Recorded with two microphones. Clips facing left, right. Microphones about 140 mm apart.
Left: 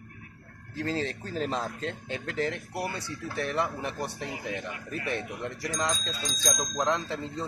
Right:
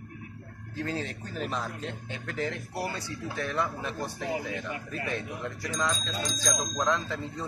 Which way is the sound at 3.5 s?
20° left (ahead or behind).